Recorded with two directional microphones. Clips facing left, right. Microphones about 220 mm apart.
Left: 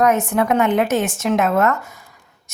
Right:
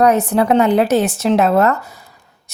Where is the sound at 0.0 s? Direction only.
35° right (ahead or behind).